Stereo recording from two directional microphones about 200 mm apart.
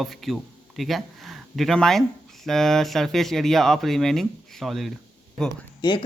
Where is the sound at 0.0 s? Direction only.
Centre (ahead or behind).